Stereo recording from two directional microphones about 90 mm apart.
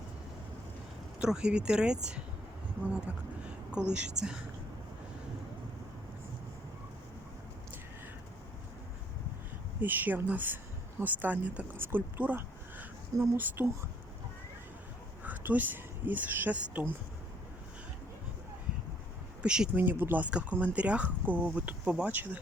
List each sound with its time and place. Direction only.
1.2 s speech: 10° right (ahead or behind)
3.9 s speech: 10° right (ahead or behind)
9.8 s speech: 20° right (ahead or behind)
15.2 s speech: 20° right (ahead or behind)
19.4 s speech: 10° right (ahead or behind)
19.7 s speech: 20° right (ahead or behind)